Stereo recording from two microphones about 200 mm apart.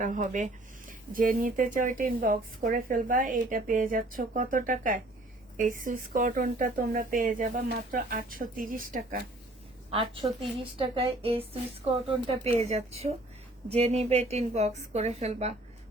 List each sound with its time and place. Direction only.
0.0 s speech: 40° right (ahead or behind)
9.9 s a woman's voice: 25° right (ahead or behind)